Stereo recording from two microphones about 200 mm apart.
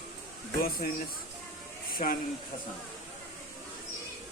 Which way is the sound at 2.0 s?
40° left (ahead or behind).